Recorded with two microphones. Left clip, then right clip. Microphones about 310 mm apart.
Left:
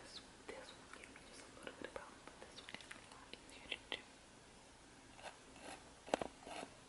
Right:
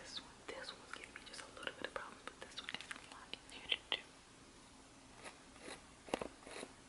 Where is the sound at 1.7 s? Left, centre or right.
Centre.